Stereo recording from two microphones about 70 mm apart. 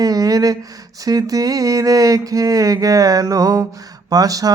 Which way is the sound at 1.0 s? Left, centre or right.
Right.